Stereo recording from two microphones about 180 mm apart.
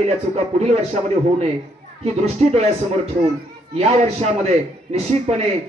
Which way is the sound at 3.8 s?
35° right (ahead or behind).